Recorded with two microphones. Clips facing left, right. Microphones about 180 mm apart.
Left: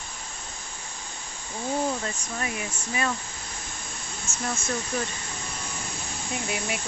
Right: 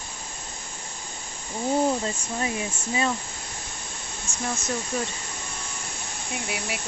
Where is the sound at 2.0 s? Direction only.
25° right (ahead or behind).